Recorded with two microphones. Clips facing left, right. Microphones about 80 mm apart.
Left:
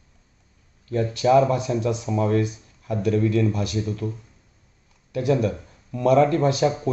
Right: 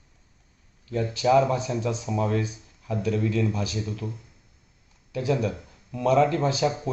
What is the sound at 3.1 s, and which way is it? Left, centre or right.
Speech, left.